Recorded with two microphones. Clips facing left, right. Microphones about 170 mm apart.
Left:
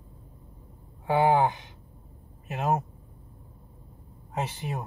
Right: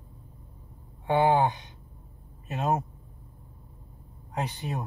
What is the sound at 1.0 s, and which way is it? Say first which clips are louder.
Speech: even; centre (ahead or behind).